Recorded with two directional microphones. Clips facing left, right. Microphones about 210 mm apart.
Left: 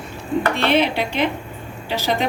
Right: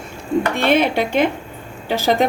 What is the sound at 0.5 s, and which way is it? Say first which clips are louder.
Speech: right 3 dB; 50° right (ahead or behind).